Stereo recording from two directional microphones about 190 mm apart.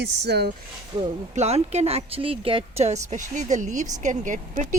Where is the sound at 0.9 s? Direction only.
20° right (ahead or behind).